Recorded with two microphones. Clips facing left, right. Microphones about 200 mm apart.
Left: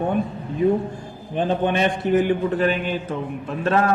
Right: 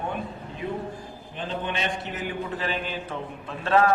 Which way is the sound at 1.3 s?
55° left (ahead or behind).